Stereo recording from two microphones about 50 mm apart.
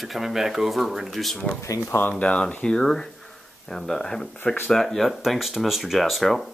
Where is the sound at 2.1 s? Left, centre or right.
Left.